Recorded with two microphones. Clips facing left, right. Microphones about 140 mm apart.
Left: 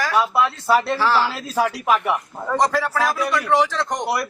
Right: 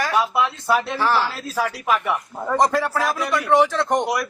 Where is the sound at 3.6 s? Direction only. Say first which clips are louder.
Right 2 dB; 20° right (ahead or behind).